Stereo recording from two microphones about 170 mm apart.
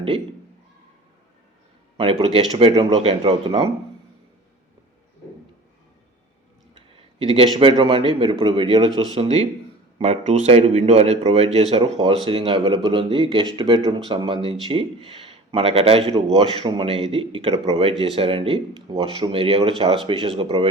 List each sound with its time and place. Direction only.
2.0 s speech: 35° right (ahead or behind)
6.7 s speech: 30° right (ahead or behind)